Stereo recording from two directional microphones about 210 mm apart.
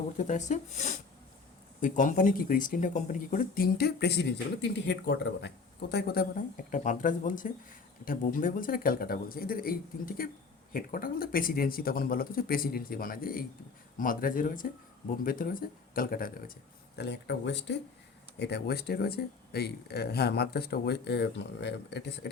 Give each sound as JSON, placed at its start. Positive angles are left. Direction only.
{"t": 0.2, "sound": "speech", "side_deg": 35}
{"t": 17.0, "sound": "speech", "side_deg": 55}